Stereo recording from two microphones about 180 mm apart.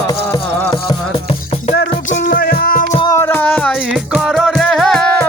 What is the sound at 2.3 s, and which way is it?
Music, 55° left (ahead or behind).